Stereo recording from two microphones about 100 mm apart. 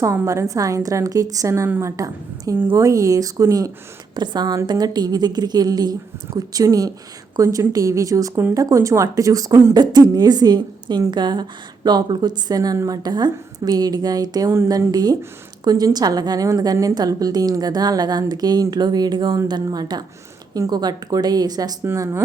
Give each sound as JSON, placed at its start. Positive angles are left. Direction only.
{"t": 0.0, "sound": "a woman's voice", "side_deg": -30}
{"t": 4.1, "sound": "a woman's voice", "side_deg": -45}
{"t": 21.8, "sound": "speech", "side_deg": -30}